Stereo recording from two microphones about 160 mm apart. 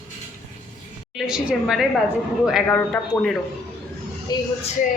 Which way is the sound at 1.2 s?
5° right (ahead or behind).